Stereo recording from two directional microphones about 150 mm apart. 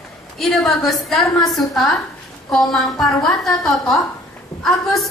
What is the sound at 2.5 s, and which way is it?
A woman's voice, 5° left (ahead or behind).